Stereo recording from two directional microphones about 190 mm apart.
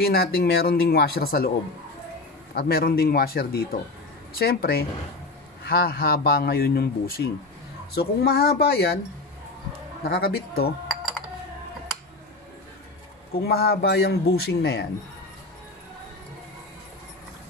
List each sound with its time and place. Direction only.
0.0 s a man's voice: 55° left (ahead or behind)
2.5 s a man's voice: 50° left (ahead or behind)
10.0 s a man's voice: 55° left (ahead or behind)
13.3 s a man's voice: 55° left (ahead or behind)